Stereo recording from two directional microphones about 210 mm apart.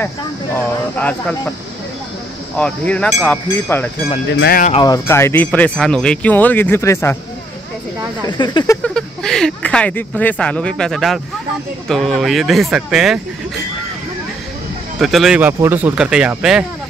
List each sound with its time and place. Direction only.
2.5 s speech: 5° left (ahead or behind)
4.4 s speech: 45° left (ahead or behind)
4.6 s speech: 20° left (ahead or behind)
8.3 s speech: 20° left (ahead or behind)
8.8 s speech: centre (ahead or behind)
15.0 s speech: centre (ahead or behind)